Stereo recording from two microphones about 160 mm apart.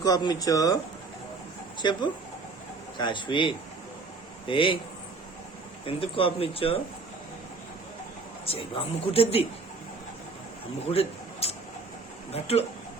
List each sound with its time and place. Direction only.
0.0 s speech: 25° left (ahead or behind)
1.8 s speech: 30° left (ahead or behind)
3.0 s speech: 30° left (ahead or behind)
5.8 s speech: 35° left (ahead or behind)
8.4 s speech: 35° left (ahead or behind)
10.9 s a sound: 40° left (ahead or behind)
12.3 s speech: 40° left (ahead or behind)